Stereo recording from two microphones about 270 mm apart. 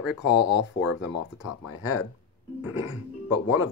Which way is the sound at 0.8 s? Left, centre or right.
Left.